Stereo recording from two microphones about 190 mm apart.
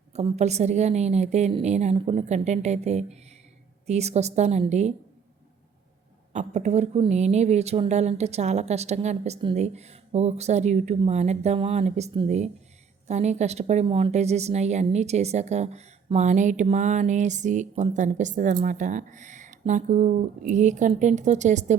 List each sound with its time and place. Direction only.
0.1 s a woman's voice: 35° right (ahead or behind)
6.3 s a woman's voice: 35° right (ahead or behind)